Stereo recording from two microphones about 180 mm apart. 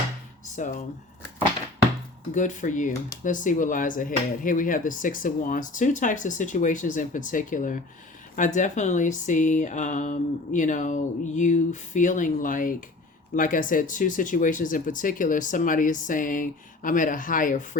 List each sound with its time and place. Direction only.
0.5 s speech: 45° left (ahead or behind)
2.3 s speech: 45° left (ahead or behind)